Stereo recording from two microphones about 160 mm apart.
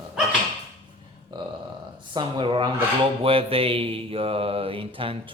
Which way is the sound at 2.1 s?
30° right (ahead or behind).